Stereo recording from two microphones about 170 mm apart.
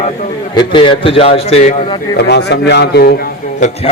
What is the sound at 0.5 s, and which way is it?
A man's voice, 25° left (ahead or behind).